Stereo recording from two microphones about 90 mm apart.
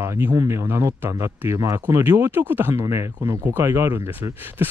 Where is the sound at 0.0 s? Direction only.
30° right (ahead or behind).